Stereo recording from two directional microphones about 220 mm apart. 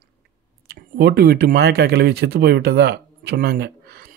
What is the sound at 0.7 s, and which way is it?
Speech, 45° right (ahead or behind).